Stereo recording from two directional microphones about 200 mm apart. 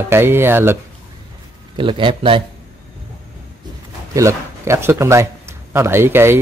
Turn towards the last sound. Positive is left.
turn(degrees=-10)  # may be behind; listen again after turning